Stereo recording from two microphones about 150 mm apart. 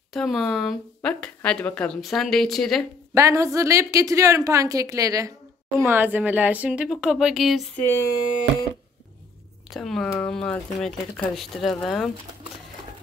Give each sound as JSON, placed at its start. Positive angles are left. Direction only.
{"t": 0.1, "sound": "speech", "side_deg": 0}
{"t": 3.2, "sound": "a woman's voice", "side_deg": -20}
{"t": 5.9, "sound": "speech", "side_deg": -15}
{"t": 7.8, "sound": "speech", "side_deg": 15}
{"t": 9.7, "sound": "speech", "side_deg": 0}